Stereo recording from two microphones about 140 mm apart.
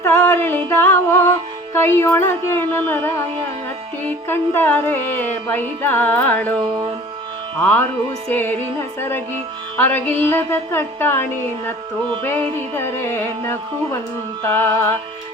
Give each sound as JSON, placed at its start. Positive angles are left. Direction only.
{"t": 0.0, "sound": "a sound", "side_deg": 20}
{"t": 1.7, "sound": "music", "side_deg": 15}
{"t": 7.6, "sound": "music", "side_deg": 10}